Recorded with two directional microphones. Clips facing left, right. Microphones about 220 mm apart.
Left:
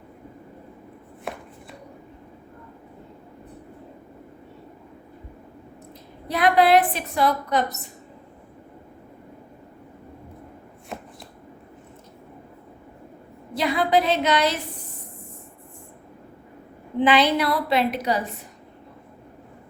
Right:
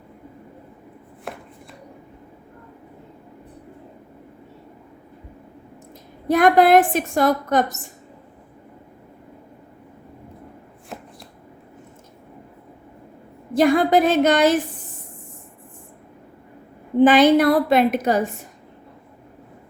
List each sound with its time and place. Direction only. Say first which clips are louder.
6.2 s a woman's voice: right 4 dB; 45° right (ahead or behind)
13.5 s a woman's voice: right 6 dB; 50° right (ahead or behind)
17.0 s a woman's voice: right 7 dB; 45° right (ahead or behind)